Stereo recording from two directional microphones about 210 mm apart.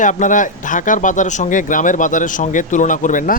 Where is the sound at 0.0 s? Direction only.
35° left (ahead or behind).